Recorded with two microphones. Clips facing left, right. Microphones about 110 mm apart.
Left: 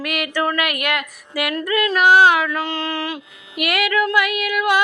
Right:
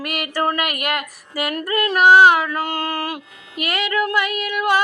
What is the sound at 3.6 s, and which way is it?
Speech, 30° right (ahead or behind).